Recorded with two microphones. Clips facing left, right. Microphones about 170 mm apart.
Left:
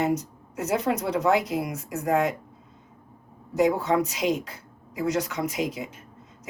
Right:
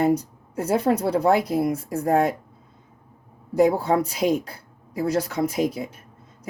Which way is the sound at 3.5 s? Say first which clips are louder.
Right 3 dB; 35° right (ahead or behind).